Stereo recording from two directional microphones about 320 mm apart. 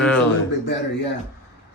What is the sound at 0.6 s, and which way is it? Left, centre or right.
Speech, left.